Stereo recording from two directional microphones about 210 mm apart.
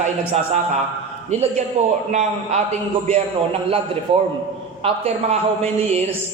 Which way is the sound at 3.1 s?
30° right (ahead or behind).